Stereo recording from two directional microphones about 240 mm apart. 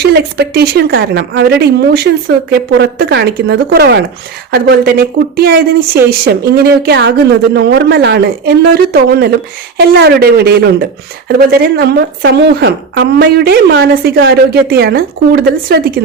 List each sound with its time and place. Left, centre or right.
0.0 s a woman's voice: right